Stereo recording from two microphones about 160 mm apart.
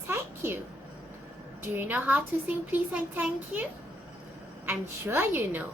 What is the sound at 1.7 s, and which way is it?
A child's voice, 10° right (ahead or behind).